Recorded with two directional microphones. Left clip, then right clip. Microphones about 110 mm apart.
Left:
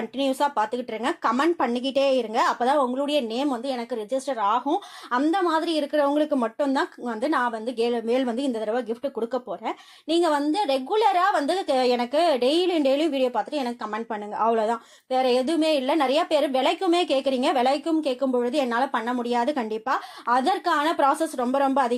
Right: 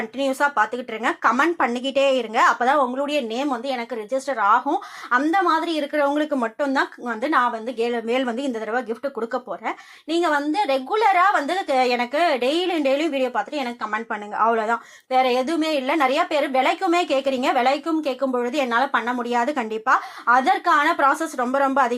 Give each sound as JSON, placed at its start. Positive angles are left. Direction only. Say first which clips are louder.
{"t": 0.2, "sound": "a woman's voice", "louder": "right 3 dB", "side_deg": 15}
{"t": 15.1, "sound": "speech", "louder": "right 2 dB", "side_deg": 10}